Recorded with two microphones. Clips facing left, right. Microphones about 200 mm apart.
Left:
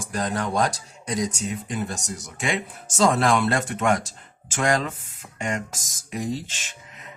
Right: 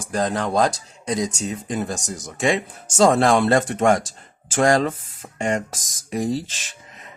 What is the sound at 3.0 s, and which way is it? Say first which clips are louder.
Speech: right 4 dB; 30° right (ahead or behind).